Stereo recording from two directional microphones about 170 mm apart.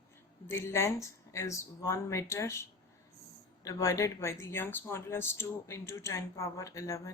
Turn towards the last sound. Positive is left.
turn(degrees=20)  # may be behind; listen again after turning